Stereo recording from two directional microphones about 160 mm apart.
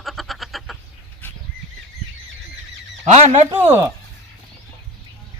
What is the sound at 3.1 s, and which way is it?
Speech, 45° right (ahead or behind).